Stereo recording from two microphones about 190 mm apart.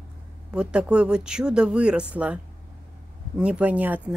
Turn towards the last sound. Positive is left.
turn(degrees=-10)  # may be behind; listen again after turning